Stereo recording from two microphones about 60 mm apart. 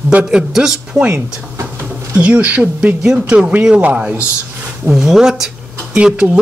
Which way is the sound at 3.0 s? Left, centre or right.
Centre.